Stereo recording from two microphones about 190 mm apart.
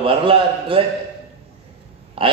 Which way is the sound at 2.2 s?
30° right (ahead or behind).